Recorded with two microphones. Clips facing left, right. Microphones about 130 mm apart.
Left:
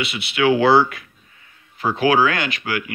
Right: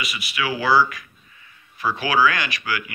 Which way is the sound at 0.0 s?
70° left (ahead or behind).